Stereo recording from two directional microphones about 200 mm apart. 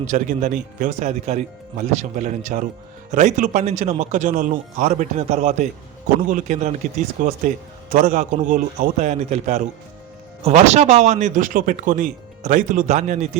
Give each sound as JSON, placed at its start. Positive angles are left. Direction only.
{"t": 0.0, "sound": "speech", "side_deg": -40}